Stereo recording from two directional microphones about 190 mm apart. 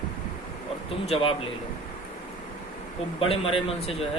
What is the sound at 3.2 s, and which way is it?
Speech, 30° left (ahead or behind).